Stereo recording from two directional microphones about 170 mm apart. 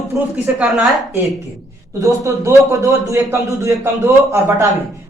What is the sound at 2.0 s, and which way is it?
A man's voice, 20° right (ahead or behind).